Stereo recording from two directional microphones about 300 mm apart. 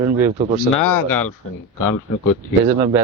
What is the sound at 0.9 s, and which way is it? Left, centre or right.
Speech, left.